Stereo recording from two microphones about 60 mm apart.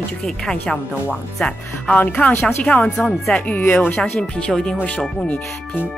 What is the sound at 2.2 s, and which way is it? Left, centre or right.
Speech, left.